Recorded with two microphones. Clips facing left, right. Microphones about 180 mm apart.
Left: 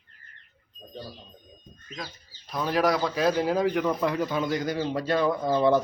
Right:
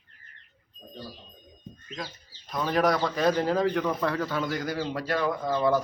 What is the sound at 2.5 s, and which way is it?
A man's voice, 5° left (ahead or behind).